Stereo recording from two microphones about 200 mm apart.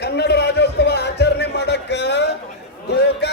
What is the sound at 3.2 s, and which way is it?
Music, 55° left (ahead or behind).